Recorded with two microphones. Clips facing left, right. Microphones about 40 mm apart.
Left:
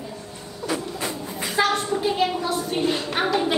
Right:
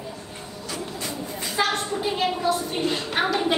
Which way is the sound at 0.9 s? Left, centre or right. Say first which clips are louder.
Left 2 dB; centre.